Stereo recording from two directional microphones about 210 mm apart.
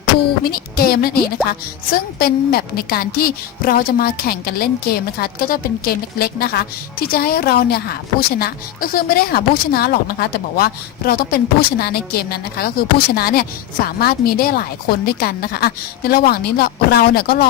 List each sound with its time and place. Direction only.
0.4 s a woman's voice: 45° left (ahead or behind)